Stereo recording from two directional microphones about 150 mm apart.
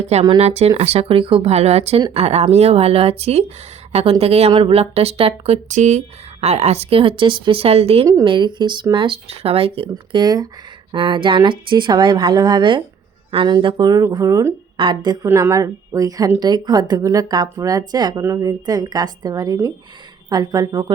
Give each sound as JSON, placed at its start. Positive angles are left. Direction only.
{"t": 0.3, "sound": "speech", "side_deg": -45}
{"t": 5.6, "sound": "a woman's voice", "side_deg": -55}